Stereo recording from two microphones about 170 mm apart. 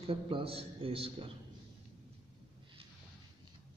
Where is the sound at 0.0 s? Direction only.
30° right (ahead or behind).